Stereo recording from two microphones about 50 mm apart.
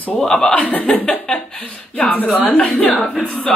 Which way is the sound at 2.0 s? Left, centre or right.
Left.